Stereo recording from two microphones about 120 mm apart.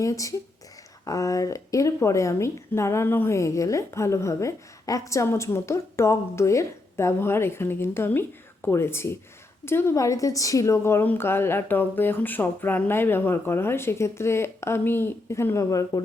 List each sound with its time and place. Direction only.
0.0 s speech: 25° left (ahead or behind)